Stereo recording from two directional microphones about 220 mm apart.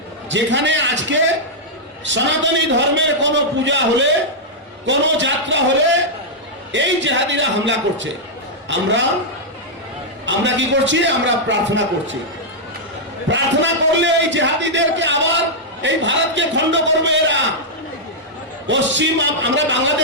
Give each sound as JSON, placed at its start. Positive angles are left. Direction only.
{"t": 0.3, "sound": "a man's voice", "side_deg": -55}
{"t": 6.7, "sound": "a man's voice", "side_deg": -55}
{"t": 10.2, "sound": "a man's voice", "side_deg": -55}
{"t": 13.3, "sound": "a man's voice", "side_deg": -55}
{"t": 18.7, "sound": "a man's voice", "side_deg": -55}